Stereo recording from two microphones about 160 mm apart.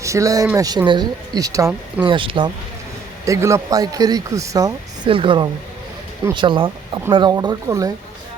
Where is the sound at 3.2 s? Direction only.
20° right (ahead or behind).